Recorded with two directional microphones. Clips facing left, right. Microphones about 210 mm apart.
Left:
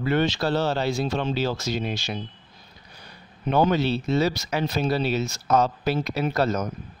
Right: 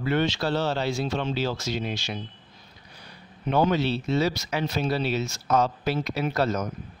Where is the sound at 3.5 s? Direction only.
45° left (ahead or behind).